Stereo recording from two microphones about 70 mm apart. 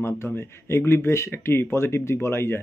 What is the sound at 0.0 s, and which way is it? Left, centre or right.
A man's voice, left.